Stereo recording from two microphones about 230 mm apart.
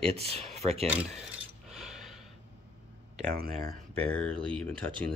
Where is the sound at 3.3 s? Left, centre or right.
Right.